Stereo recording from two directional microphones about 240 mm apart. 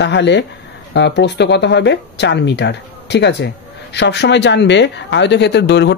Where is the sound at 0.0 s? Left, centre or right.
Left.